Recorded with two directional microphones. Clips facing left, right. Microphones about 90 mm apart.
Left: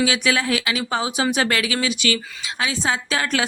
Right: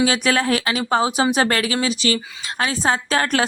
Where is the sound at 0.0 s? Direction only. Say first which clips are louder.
Right 2 dB; 40° right (ahead or behind).